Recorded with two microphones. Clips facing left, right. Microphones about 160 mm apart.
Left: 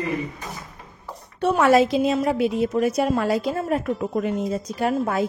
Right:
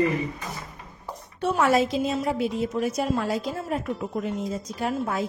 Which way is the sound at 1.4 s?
70° left (ahead or behind).